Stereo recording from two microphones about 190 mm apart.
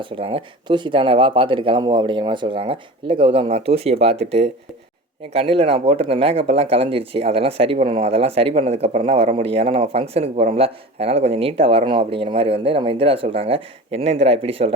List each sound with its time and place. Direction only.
0.0 s speech: 25° right (ahead or behind)